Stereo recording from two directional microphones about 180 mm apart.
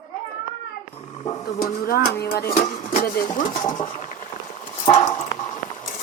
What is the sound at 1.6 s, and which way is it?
Speech, 55° left (ahead or behind).